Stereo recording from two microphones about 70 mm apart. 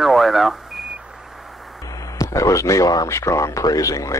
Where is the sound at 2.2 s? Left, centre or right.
Left.